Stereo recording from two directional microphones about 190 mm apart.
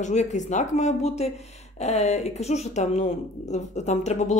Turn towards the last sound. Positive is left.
turn(degrees=35)  # may be behind; listen again after turning